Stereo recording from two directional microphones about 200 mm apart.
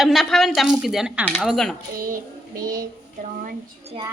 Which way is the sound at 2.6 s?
45° right (ahead or behind).